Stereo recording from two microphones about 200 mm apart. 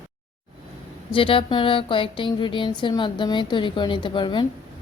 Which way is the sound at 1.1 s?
25° left (ahead or behind).